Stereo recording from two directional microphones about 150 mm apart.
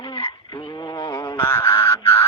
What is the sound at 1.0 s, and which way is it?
Frog, 30° left (ahead or behind).